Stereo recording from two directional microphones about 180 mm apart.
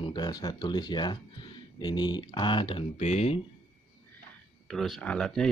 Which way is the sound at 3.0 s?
40° left (ahead or behind).